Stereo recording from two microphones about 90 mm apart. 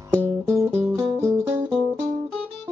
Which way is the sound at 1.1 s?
30° right (ahead or behind).